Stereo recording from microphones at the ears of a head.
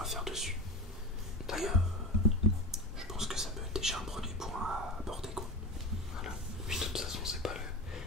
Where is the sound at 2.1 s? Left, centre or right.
Right.